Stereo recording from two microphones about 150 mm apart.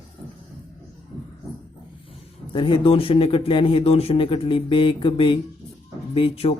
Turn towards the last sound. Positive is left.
turn(degrees=40)  # may be behind; listen again after turning